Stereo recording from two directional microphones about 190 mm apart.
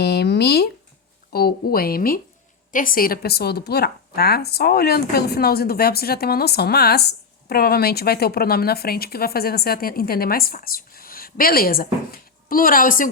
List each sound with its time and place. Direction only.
0.0 s a woman's voice: 60° left (ahead or behind)